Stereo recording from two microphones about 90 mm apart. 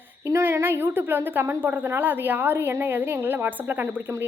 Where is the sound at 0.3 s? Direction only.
30° right (ahead or behind).